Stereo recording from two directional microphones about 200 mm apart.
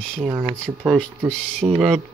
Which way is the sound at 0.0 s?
5° left (ahead or behind).